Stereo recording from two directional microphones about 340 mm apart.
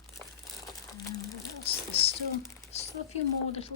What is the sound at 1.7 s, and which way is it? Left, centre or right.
A woman's voice, centre.